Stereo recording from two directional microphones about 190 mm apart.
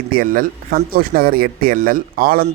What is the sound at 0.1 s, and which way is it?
Speech, 50° right (ahead or behind).